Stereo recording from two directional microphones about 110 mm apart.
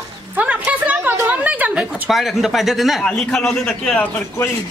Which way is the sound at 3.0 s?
5° left (ahead or behind).